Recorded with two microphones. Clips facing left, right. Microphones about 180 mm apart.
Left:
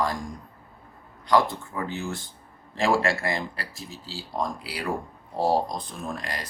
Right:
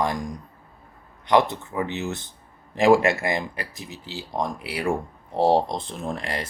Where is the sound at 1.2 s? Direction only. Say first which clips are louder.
Right 2 dB; 20° right (ahead or behind).